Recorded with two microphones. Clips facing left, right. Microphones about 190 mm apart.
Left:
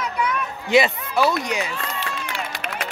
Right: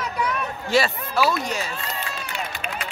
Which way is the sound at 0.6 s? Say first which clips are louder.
Left 4 dB; 20° left (ahead or behind).